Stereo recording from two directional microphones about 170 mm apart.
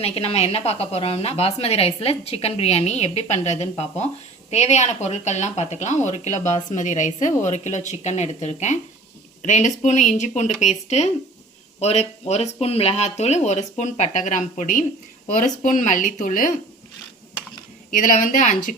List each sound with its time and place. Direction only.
0.0 s speech: 35° left (ahead or behind)
17.9 s speech: 50° left (ahead or behind)